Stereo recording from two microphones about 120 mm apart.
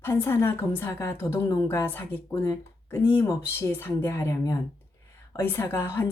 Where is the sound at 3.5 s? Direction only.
20° left (ahead or behind).